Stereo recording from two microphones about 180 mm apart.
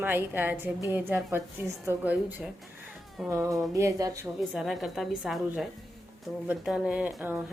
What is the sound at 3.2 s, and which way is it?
Speech, 15° right (ahead or behind).